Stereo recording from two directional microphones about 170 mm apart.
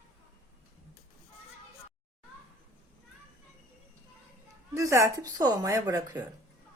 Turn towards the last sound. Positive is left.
turn(degrees=-15)  # may be behind; listen again after turning